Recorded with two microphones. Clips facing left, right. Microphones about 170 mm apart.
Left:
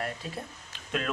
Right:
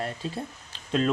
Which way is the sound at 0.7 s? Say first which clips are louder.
Right 7 dB; 30° right (ahead or behind).